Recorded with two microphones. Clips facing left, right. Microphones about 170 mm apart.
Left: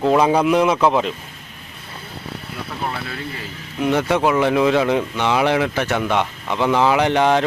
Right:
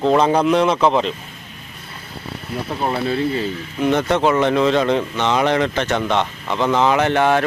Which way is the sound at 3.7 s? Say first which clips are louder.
Right 1 dB; 5° left (ahead or behind).